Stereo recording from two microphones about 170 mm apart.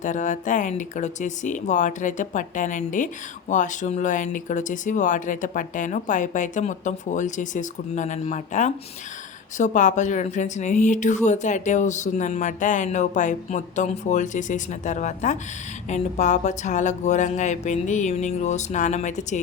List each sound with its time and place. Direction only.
0.0 s speech: 50° left (ahead or behind)